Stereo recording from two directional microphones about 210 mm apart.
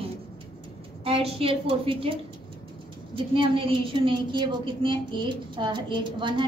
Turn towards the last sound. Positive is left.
turn(degrees=-20)  # may be behind; listen again after turning